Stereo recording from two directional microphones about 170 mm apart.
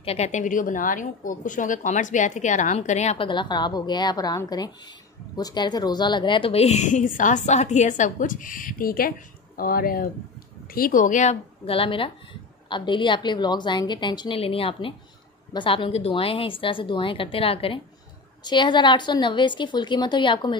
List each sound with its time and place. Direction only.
0.0 s a woman's voice: 40° left (ahead or behind)
3.3 s a woman's voice: 25° left (ahead or behind)